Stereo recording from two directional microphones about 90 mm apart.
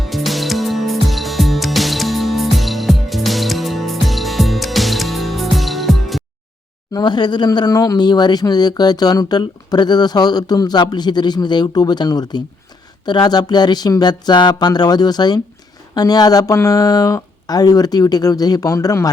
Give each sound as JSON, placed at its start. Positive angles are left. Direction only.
{"t": 0.0, "sound": "music", "side_deg": 0}
{"t": 6.9, "sound": "speech", "side_deg": 55}